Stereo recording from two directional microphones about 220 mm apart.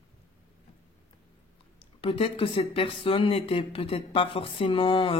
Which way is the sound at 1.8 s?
25° left (ahead or behind).